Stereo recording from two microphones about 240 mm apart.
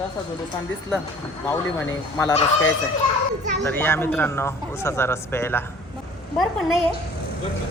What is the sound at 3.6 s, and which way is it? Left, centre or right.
A woman's voice, centre.